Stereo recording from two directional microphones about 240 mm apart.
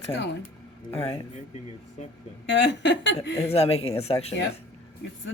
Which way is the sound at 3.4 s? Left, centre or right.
Left.